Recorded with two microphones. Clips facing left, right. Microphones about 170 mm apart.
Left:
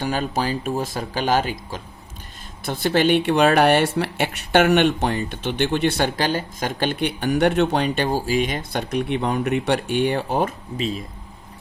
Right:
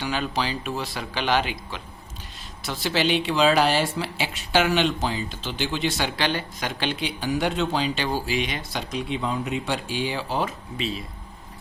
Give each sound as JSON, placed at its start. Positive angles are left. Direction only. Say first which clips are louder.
{"t": 0.0, "sound": "speech", "louder": "left 3 dB", "side_deg": 45}
{"t": 2.6, "sound": "speech", "louder": "left 6 dB", "side_deg": 55}